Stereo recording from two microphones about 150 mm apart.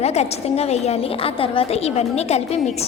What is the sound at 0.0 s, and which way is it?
A woman's voice, 45° left (ahead or behind).